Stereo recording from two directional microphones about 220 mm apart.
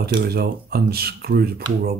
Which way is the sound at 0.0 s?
45° right (ahead or behind).